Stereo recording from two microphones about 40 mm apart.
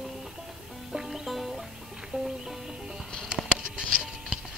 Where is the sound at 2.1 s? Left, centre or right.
Right.